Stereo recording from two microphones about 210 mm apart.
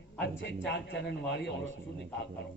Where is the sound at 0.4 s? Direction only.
55° left (ahead or behind).